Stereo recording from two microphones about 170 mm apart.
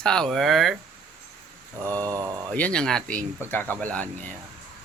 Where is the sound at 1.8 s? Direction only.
20° right (ahead or behind).